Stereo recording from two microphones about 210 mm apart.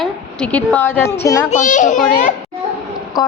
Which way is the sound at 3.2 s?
15° left (ahead or behind).